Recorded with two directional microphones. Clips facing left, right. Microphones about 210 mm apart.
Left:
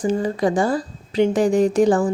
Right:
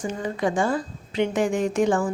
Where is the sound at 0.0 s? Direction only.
35° left (ahead or behind).